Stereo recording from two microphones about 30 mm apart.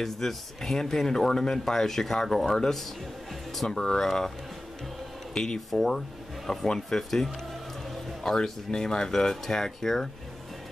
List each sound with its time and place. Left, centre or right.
0.0 s speech: centre
2.4 s speech: left
4.0 s speech: centre
5.3 s speech: left
5.7 s speech: centre
6.6 s speech: centre
7.0 s speech: centre
8.4 s speech: left